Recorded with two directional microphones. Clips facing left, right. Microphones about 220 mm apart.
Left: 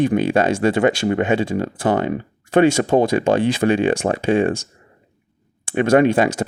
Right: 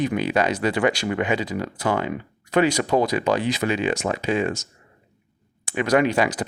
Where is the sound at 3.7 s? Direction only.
55° left (ahead or behind).